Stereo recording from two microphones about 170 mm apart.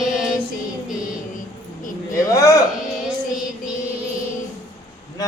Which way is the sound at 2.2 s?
20° left (ahead or behind).